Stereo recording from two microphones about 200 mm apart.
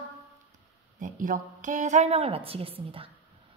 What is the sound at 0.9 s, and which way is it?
A woman's voice, 40° right (ahead or behind).